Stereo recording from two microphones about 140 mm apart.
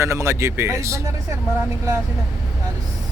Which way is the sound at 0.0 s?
20° right (ahead or behind).